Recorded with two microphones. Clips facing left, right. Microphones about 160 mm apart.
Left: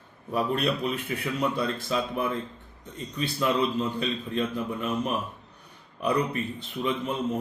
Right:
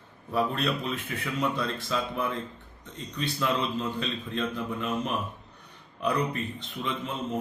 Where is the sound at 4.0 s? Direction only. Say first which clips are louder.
Left 3 dB; 10° left (ahead or behind).